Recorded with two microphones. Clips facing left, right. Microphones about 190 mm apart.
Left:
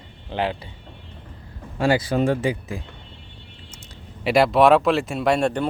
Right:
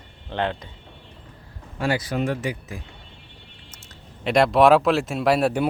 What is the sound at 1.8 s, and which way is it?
Speech, 30° left (ahead or behind).